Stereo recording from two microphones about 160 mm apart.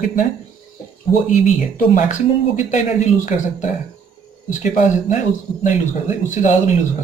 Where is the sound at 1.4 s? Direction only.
55° left (ahead or behind).